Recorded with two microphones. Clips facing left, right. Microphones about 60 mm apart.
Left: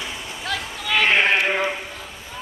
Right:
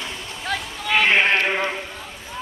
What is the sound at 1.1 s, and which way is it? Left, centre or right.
Sheep, centre.